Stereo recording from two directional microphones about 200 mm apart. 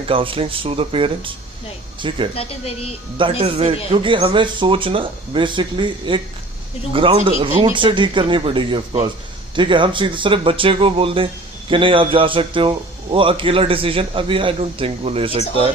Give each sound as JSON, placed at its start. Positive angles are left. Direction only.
{"t": 0.1, "sound": "a man's voice", "side_deg": -25}
{"t": 2.3, "sound": "speech", "side_deg": 30}
{"t": 3.2, "sound": "a man's voice", "side_deg": -25}